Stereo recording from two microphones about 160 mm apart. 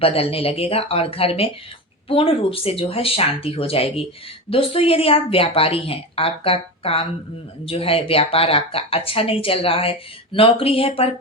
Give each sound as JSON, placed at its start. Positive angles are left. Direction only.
{"t": 0.0, "sound": "speech", "side_deg": 35}